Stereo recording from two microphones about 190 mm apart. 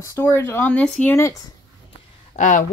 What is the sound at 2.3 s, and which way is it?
Speech, 40° left (ahead or behind).